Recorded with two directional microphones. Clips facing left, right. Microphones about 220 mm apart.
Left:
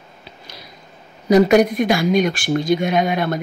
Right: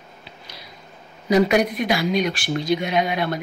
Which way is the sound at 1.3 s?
45° left (ahead or behind).